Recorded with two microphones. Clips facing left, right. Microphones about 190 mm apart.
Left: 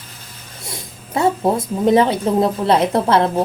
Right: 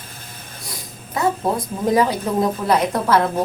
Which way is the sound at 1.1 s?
25° left (ahead or behind).